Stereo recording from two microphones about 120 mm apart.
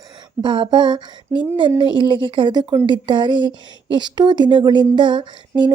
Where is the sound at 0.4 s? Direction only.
40° right (ahead or behind).